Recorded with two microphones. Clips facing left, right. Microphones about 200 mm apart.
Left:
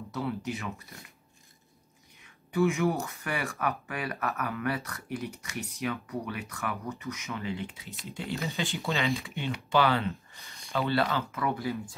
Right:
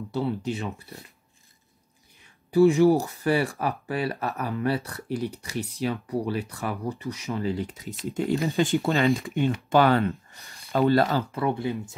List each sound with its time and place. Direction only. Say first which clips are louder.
0.1 s speech: right 5 dB; 30° right (ahead or behind)
2.5 s speech: right 9 dB; 30° right (ahead or behind)